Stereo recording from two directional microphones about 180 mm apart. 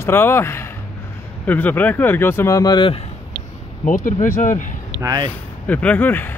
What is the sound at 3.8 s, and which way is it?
Speech, 45° left (ahead or behind).